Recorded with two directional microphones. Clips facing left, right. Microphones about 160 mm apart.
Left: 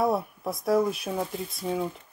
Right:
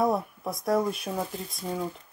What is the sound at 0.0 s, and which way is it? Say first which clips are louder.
Speech: even; centre (ahead or behind).